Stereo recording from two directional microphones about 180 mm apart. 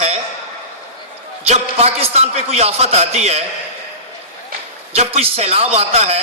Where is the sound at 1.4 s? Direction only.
35° right (ahead or behind).